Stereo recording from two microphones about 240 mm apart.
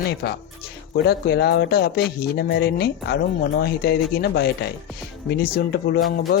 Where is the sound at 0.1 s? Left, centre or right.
Left.